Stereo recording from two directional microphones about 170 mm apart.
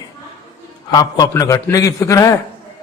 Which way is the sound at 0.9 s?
25° left (ahead or behind).